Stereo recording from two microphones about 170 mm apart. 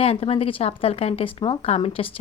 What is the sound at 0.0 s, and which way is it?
Speech, 35° left (ahead or behind).